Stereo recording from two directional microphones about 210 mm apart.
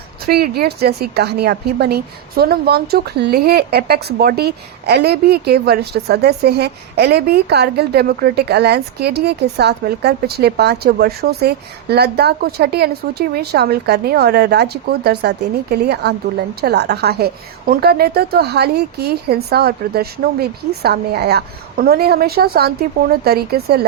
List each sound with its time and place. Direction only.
0.3 s a woman's voice: 45° right (ahead or behind)